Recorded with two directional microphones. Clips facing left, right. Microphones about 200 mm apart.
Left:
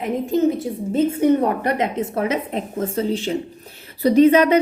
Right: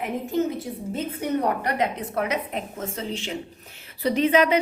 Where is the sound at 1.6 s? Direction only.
25° left (ahead or behind).